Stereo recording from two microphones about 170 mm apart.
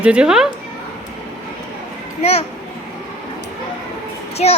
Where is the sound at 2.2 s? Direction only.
40° left (ahead or behind).